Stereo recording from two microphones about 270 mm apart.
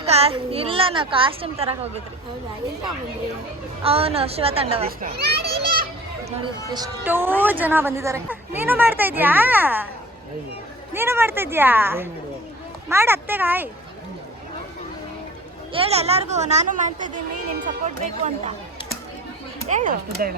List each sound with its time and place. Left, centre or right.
0.0 s a child's voice: right
3.8 s a child's voice: right
4.9 s a child's voice: right
5.6 s children playing: right
6.4 s a woman's voice: centre
10.9 s a woman's voice: centre
15.7 s a child's voice: right
19.6 s a child's voice: right